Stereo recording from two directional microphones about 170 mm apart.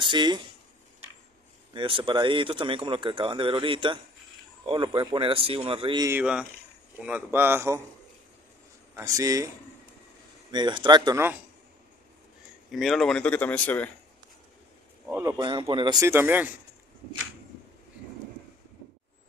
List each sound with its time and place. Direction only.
0.0 s speech: 25° right (ahead or behind)
1.7 s speech: 30° right (ahead or behind)
6.0 s a man's voice: 10° right (ahead or behind)
8.9 s speech: 20° right (ahead or behind)
10.5 s speech: 25° right (ahead or behind)
12.7 s speech: centre (ahead or behind)
15.0 s a man's voice: 15° right (ahead or behind)
15.3 s speech: 25° right (ahead or behind); by 16.4 s 10° right (ahead or behind)